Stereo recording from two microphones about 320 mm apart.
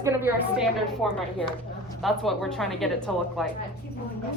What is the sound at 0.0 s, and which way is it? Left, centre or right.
A woman's voice, centre.